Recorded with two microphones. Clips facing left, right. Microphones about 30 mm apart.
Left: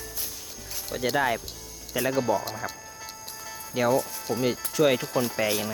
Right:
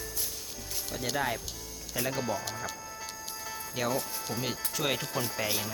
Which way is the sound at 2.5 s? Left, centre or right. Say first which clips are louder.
Left 3 dB; left.